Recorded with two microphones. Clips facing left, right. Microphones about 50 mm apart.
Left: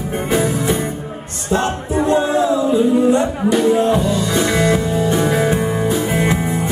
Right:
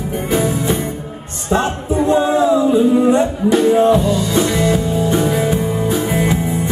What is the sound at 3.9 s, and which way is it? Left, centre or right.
Music, left.